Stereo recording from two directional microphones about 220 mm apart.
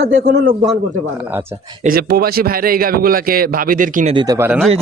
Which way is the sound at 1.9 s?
45° right (ahead or behind).